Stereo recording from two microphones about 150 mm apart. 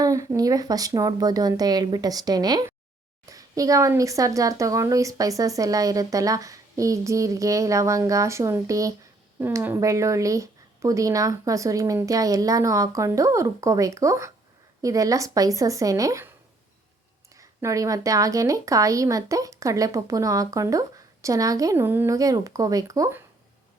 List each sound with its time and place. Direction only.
0.0 s speech: 25° right (ahead or behind)
17.3 s speech: 20° right (ahead or behind)